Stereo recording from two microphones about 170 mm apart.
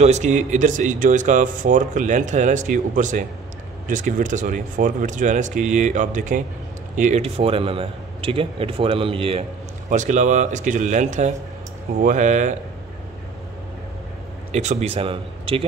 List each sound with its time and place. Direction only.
0.0 s a man's voice: 45° right (ahead or behind)
9.8 s speech: 45° right (ahead or behind)
14.5 s speech: 40° right (ahead or behind)